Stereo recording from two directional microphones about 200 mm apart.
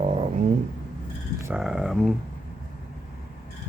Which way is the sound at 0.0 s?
30° right (ahead or behind).